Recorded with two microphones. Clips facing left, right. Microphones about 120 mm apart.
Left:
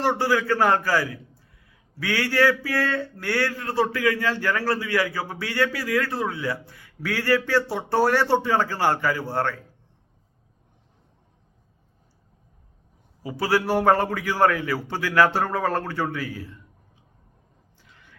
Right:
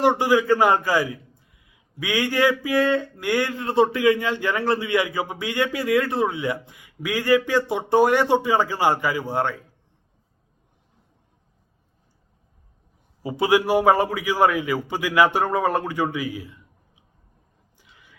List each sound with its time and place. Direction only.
0.0 s a man's voice: 15° right (ahead or behind)
13.2 s a man's voice: 20° right (ahead or behind)
17.7 s a sound: 10° right (ahead or behind)